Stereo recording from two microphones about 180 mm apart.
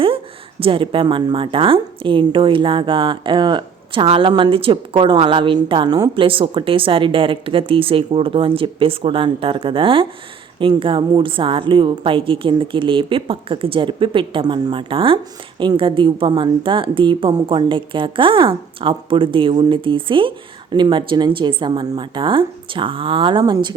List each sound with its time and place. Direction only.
0.6 s a woman's voice: 30° right (ahead or behind)